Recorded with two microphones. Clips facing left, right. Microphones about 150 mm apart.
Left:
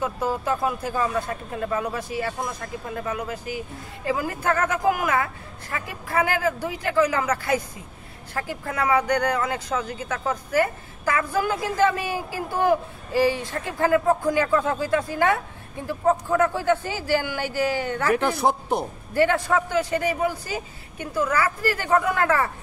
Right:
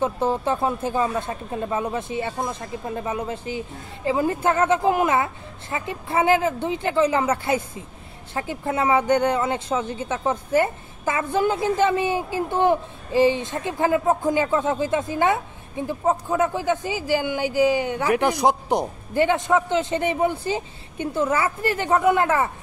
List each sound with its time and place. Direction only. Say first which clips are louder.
0.0 s speech: right 3 dB; 25° right (ahead or behind)